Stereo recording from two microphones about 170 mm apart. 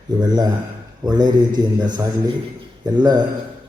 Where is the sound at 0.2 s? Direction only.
25° right (ahead or behind).